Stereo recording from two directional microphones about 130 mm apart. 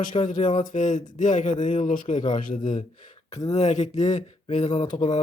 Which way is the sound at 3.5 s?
65° left (ahead or behind).